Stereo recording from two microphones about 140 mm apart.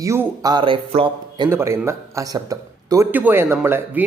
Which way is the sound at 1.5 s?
20° right (ahead or behind).